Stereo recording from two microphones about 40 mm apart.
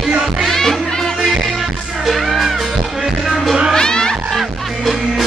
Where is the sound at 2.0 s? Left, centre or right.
Centre.